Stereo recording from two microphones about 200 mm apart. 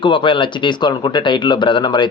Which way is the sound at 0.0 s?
25° left (ahead or behind).